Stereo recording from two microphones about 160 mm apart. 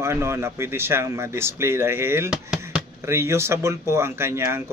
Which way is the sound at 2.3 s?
5° right (ahead or behind).